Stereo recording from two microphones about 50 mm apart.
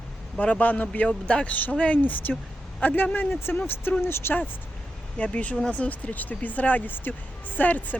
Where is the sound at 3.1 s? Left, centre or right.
Left.